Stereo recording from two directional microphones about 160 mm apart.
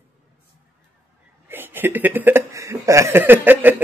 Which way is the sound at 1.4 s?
10° right (ahead or behind).